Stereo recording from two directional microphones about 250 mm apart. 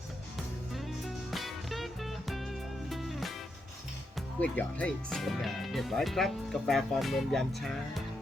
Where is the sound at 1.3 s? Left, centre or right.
Centre.